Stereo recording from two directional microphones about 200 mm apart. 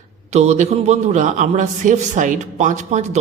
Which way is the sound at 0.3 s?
35° right (ahead or behind).